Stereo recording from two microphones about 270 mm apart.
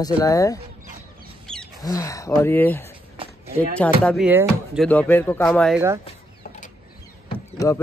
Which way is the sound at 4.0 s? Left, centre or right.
Centre.